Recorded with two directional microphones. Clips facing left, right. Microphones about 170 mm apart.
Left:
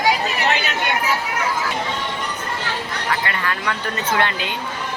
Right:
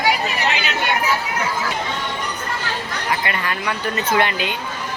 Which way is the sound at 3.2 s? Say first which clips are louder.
Even; 15° right (ahead or behind).